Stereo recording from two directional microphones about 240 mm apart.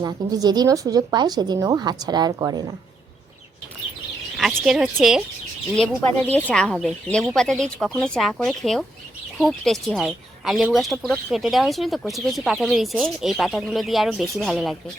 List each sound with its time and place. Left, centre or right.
0.0 s a woman's voice: centre
4.4 s speech: centre